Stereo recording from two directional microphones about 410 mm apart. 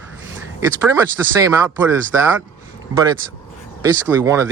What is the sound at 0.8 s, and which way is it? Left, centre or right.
Speech, centre.